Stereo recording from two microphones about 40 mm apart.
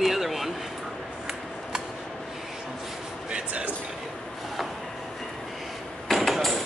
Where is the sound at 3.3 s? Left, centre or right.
Right.